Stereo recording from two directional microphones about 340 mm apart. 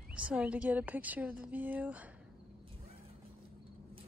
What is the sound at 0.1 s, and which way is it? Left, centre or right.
A woman's voice, centre.